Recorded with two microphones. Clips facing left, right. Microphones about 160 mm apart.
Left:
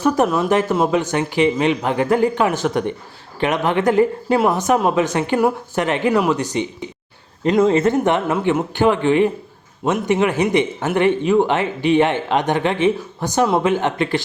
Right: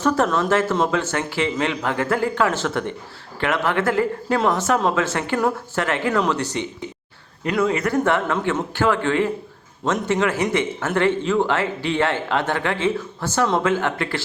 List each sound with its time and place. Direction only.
0.0 s speech: 15° left (ahead or behind)
7.4 s speech: 30° left (ahead or behind)